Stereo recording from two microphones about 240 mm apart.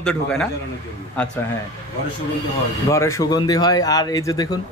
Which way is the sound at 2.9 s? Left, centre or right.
Centre.